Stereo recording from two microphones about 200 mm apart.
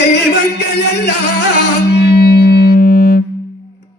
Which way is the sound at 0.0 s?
55° left (ahead or behind).